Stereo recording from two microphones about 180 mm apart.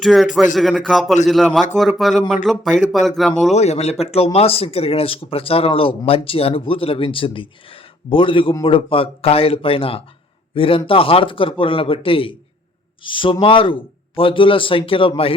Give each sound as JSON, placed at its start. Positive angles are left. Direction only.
{"t": 0.0, "sound": "speech", "side_deg": 0}
{"t": 3.5, "sound": "speech", "side_deg": 35}